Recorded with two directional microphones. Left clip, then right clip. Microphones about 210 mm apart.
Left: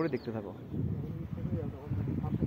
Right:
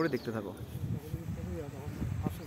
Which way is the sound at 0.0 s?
5° right (ahead or behind).